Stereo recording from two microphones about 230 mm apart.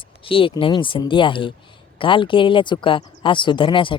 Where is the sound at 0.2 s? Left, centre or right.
Left.